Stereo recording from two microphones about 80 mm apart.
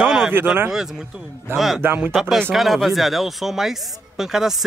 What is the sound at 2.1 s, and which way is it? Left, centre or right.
Speech, centre.